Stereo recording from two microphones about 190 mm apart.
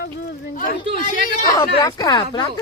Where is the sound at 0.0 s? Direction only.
55° left (ahead or behind).